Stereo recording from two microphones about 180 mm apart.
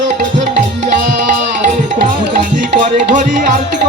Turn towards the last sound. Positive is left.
turn(degrees=-45)  # may be behind; listen again after turning